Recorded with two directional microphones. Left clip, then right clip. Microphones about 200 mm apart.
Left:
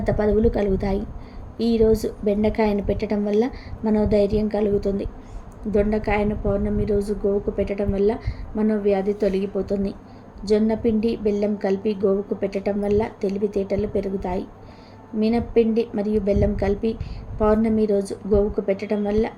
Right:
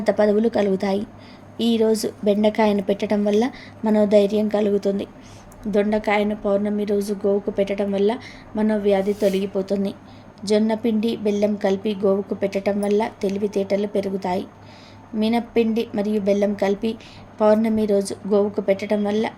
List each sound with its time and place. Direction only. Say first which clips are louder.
0.0 s a woman's voice: right 2 dB; 10° right (ahead or behind)
15.5 s a woman's voice: left 4 dB; 10° right (ahead or behind)